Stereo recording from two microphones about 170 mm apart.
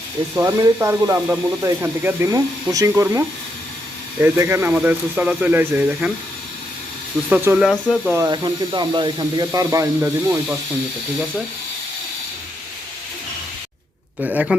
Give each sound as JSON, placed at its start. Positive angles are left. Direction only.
{"t": 0.3, "sound": "speech", "side_deg": -20}
{"t": 7.3, "sound": "speech", "side_deg": -10}
{"t": 8.1, "sound": "speech", "side_deg": -20}
{"t": 14.2, "sound": "speech", "side_deg": -5}